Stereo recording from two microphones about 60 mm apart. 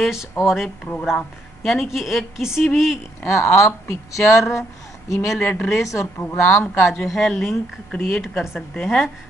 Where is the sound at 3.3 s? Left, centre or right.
Left.